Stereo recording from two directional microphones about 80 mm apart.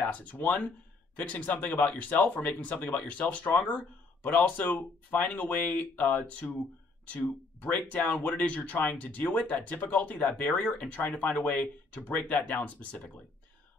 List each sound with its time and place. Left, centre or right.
0.0 s speech: centre